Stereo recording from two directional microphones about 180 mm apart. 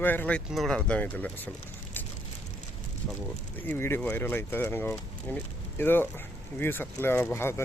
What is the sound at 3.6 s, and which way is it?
Speech, 10° left (ahead or behind).